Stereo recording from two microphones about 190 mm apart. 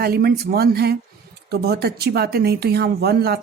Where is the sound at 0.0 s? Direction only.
55° right (ahead or behind).